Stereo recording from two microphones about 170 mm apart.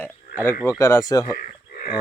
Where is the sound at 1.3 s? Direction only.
60° left (ahead or behind).